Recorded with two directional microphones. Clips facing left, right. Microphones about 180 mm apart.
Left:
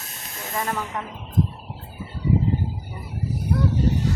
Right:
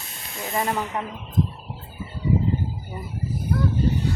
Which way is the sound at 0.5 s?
15° right (ahead or behind).